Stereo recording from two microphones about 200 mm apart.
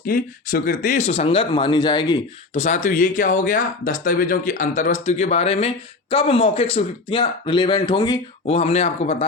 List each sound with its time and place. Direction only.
0.0 s speech: 45° left (ahead or behind)